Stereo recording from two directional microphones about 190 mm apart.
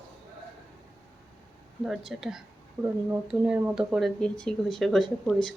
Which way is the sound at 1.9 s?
Centre (ahead or behind).